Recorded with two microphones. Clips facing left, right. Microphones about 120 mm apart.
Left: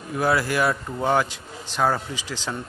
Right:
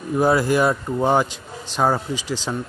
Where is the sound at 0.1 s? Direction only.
20° right (ahead or behind).